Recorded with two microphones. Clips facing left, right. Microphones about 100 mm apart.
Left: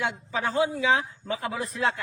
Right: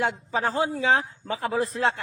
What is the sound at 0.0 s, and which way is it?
A man's voice, 35° right (ahead or behind).